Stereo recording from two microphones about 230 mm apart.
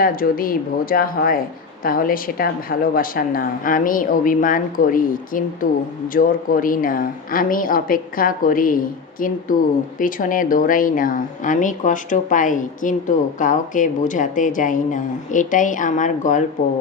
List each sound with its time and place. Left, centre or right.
0.0 s a woman's voice: left